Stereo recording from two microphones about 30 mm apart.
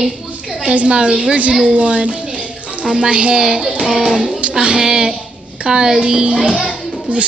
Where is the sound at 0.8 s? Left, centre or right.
Right.